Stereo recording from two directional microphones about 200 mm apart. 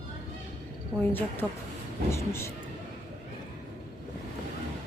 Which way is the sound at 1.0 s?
10° left (ahead or behind).